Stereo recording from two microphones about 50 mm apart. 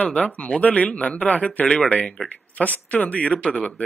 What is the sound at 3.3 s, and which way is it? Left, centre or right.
Speech, left.